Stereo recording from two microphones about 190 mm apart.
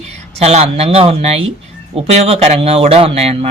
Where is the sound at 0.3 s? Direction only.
35° right (ahead or behind).